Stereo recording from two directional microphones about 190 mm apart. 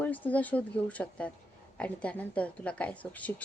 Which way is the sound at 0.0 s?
10° left (ahead or behind).